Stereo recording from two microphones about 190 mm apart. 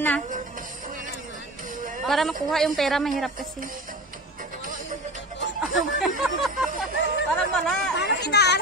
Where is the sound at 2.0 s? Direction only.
Centre (ahead or behind).